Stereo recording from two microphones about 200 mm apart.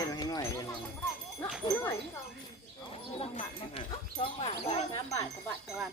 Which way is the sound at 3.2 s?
30° left (ahead or behind).